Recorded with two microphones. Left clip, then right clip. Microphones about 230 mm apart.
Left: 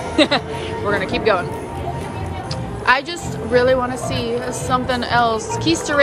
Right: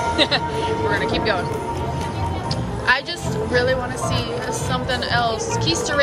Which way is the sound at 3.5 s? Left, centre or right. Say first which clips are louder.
Left 5 dB; centre.